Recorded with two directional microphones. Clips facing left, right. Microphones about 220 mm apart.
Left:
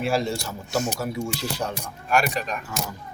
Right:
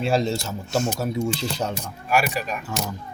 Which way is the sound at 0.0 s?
25° right (ahead or behind).